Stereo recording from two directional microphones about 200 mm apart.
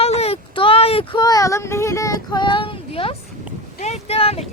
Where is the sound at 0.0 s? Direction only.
30° left (ahead or behind).